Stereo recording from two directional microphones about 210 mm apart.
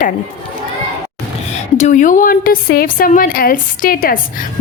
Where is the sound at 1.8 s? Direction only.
35° left (ahead or behind).